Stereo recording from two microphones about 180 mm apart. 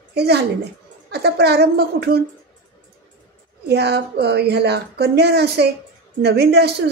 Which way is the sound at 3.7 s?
65° right (ahead or behind).